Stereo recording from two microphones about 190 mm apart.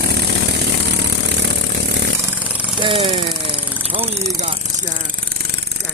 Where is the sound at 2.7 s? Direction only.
25° right (ahead or behind).